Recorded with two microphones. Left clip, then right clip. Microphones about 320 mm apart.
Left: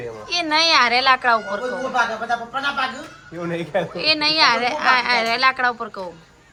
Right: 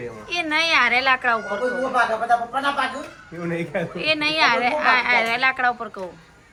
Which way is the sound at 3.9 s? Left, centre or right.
Centre.